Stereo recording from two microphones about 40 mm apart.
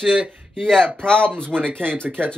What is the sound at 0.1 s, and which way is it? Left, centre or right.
Speech, right.